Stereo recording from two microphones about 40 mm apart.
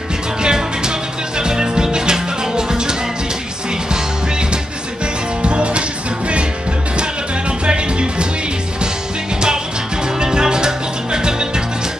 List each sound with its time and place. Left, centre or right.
0.4 s music: centre
5.4 s music: right
7.6 s music: right
10.2 s music: centre